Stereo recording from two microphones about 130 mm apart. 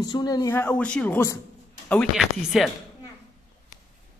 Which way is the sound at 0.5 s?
10° left (ahead or behind).